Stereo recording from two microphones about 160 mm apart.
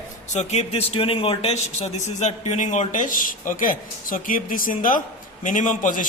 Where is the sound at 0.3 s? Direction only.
40° left (ahead or behind).